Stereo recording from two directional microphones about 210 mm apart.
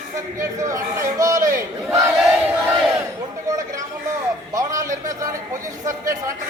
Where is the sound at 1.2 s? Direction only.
15° right (ahead or behind).